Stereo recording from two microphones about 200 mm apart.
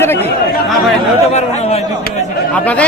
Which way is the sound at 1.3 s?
35° left (ahead or behind).